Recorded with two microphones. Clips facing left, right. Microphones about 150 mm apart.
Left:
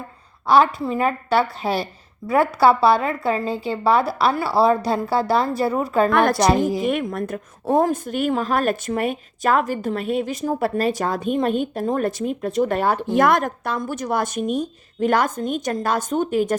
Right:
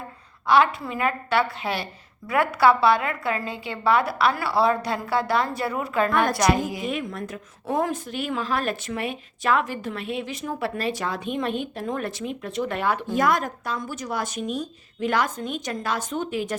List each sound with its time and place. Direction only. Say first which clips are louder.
0.4 s a woman's voice: left 3 dB; 35° left (ahead or behind)
6.1 s a woman's voice: left 5 dB; 75° left (ahead or behind)
6.3 s a woman's voice: left 4 dB; 35° left (ahead or behind)
6.8 s speech: left 6 dB; 55° left (ahead or behind); by 13.1 s 35° left (ahead or behind)
13.1 s speech: left 6 dB; 60° left (ahead or behind)